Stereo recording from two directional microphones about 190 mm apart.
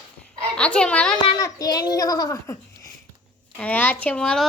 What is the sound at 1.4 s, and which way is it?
A child's voice, 15° left (ahead or behind).